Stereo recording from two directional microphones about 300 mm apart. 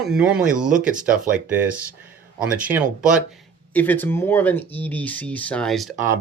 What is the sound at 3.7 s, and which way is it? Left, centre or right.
Speech, centre.